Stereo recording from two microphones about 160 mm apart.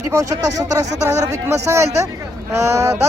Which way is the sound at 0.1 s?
20° right (ahead or behind).